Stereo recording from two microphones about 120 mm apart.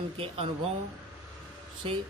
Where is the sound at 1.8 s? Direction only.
45° right (ahead or behind).